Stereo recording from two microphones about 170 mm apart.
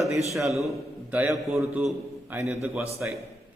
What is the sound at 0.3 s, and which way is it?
A man's voice, centre (ahead or behind).